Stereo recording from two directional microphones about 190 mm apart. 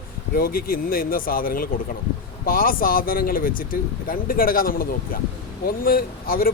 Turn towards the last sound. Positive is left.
turn(degrees=50)  # may be behind; listen again after turning